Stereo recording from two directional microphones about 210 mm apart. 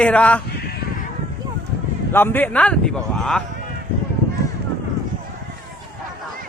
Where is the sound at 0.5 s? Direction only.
50° left (ahead or behind).